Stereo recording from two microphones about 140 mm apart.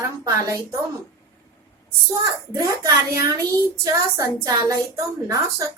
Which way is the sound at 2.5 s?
25° right (ahead or behind).